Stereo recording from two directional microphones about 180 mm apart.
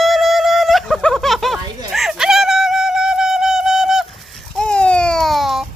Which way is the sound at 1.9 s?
Centre (ahead or behind).